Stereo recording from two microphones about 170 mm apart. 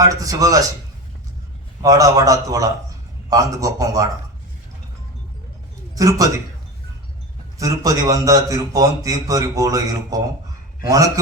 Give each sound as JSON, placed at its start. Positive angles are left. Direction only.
{"t": 0.0, "sound": "a man's voice", "side_deg": -20}
{"t": 1.8, "sound": "a man's voice", "side_deg": -20}
{"t": 5.9, "sound": "a man's voice", "side_deg": -20}
{"t": 7.6, "sound": "a man's voice", "side_deg": -20}